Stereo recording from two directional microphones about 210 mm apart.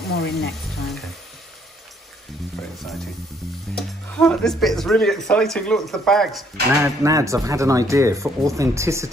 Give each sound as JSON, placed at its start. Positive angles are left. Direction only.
{"t": 0.1, "sound": "speech", "side_deg": 50}
{"t": 3.7, "sound": "speech", "side_deg": 5}
{"t": 6.8, "sound": "speech", "side_deg": -15}